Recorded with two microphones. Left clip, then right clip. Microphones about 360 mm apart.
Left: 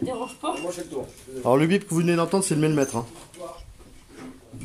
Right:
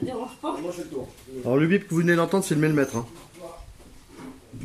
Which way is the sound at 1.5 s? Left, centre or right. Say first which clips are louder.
Left 2 dB; centre.